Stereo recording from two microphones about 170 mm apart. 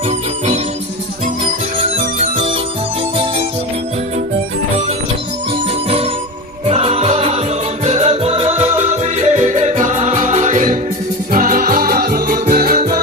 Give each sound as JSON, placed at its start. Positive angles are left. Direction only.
{"t": 0.1, "sound": "music", "side_deg": -40}
{"t": 1.8, "sound": "music", "side_deg": -40}
{"t": 6.7, "sound": "music", "side_deg": -35}